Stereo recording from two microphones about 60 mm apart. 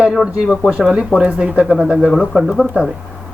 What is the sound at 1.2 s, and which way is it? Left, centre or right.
Speech, centre.